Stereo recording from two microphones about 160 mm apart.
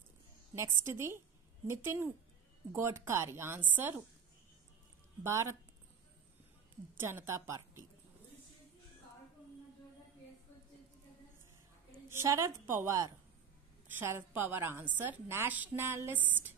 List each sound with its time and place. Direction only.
0.6 s a woman's voice: 15° right (ahead or behind)
5.2 s a woman's voice: 15° right (ahead or behind)
7.0 s a woman's voice: 15° right (ahead or behind)
12.1 s a woman's voice: 15° right (ahead or behind)